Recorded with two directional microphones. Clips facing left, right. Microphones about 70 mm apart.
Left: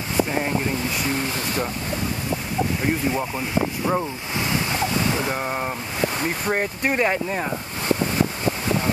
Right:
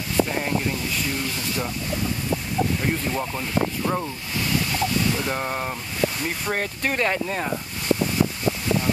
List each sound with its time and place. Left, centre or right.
2.8 s speech: centre
5.3 s speech: centre